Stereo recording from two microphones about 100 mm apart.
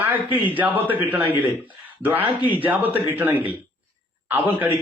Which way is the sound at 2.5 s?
20° right (ahead or behind).